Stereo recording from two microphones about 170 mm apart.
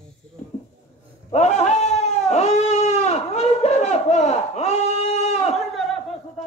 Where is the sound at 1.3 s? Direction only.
40° left (ahead or behind).